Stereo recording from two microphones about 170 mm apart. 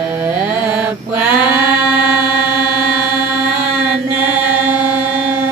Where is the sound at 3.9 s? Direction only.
10° right (ahead or behind).